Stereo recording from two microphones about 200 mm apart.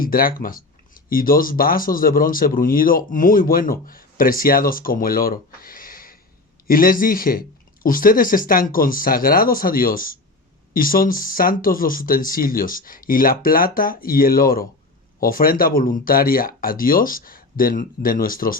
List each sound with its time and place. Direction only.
0.0 s speech: 45° left (ahead or behind)